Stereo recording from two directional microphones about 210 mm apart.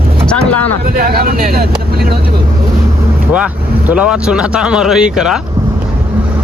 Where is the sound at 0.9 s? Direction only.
45° right (ahead or behind).